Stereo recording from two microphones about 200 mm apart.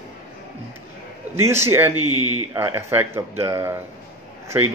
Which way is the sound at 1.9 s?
90° right.